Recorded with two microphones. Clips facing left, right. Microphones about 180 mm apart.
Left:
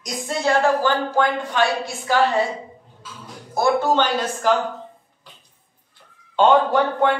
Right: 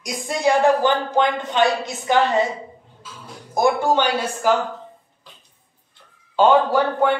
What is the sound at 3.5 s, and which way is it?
Speech, 15° right (ahead or behind).